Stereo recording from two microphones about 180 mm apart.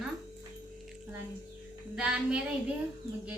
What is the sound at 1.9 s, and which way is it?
Speech, 5° right (ahead or behind).